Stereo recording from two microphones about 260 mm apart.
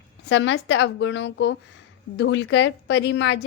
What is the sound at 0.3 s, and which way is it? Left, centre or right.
A woman's voice, left.